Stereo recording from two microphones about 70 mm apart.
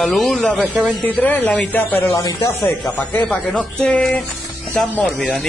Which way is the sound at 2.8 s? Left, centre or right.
Left.